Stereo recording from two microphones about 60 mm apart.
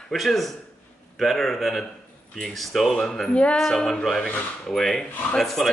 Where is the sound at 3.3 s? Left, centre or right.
Centre.